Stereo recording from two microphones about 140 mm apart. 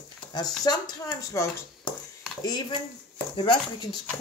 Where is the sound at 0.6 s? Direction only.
30° left (ahead or behind).